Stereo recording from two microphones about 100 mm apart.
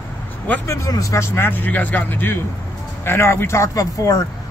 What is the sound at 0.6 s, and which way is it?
A man's voice, 30° left (ahead or behind).